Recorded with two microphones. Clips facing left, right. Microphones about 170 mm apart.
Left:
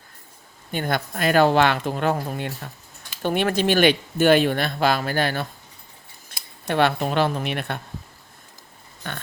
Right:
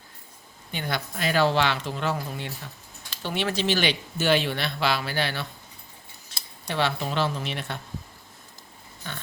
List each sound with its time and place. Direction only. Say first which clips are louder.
0.7 s speech: left 6 dB; 50° left (ahead or behind)
6.3 s scissors: left 1 dB; 55° left (ahead or behind)
6.7 s a woman's voice: left 6 dB; 55° left (ahead or behind)
9.0 s a woman's voice: left 4 dB; 60° left (ahead or behind)